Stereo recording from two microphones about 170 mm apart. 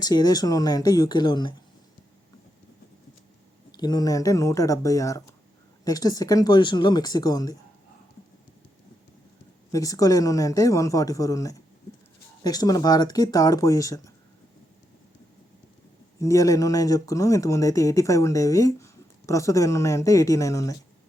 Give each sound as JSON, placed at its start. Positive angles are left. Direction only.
{"t": 0.0, "sound": "speech", "side_deg": 25}
{"t": 3.7, "sound": "speech", "side_deg": 25}
{"t": 9.7, "sound": "speech", "side_deg": 20}
{"t": 16.2, "sound": "speech", "side_deg": 20}